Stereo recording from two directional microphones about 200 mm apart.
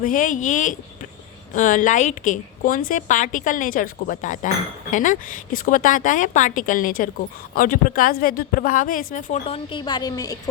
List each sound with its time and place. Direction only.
0.0 s a woman's voice: 40° left (ahead or behind)
9.7 s a woman's voice: 25° left (ahead or behind)